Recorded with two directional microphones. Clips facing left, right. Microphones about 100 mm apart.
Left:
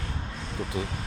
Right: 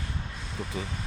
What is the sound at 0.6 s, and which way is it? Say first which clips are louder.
Speech: left 3 dB; 5° right (ahead or behind).